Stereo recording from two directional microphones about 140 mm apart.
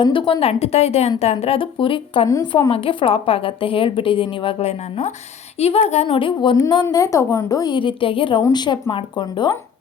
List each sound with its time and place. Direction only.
0.0 s a woman's voice: 35° left (ahead or behind)